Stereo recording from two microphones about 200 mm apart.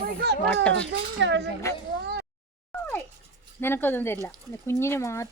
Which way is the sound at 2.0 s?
55° right (ahead or behind).